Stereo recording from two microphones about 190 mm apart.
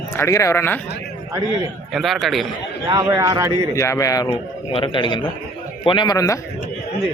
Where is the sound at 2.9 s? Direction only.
15° right (ahead or behind).